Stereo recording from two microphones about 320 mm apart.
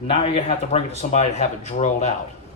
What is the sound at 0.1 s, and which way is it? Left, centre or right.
Speech, centre.